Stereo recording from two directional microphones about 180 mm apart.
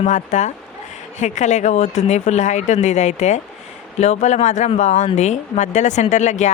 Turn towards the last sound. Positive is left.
turn(degrees=40)  # may be behind; listen again after turning